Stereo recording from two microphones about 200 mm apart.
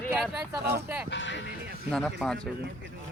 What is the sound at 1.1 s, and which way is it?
Speech, 65° left (ahead or behind).